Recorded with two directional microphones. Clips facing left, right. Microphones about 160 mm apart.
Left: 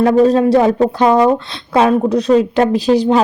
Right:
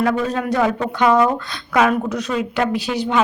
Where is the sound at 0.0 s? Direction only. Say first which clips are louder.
Left 9 dB; 30° left (ahead or behind).